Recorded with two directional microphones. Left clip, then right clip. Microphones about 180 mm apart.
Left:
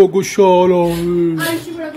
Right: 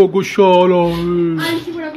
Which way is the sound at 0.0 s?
30° left (ahead or behind).